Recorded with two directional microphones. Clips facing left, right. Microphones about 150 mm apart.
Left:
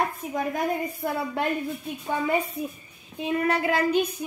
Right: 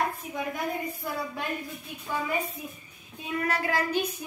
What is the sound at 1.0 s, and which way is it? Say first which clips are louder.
Speech: left 6 dB; 60° left (ahead or behind).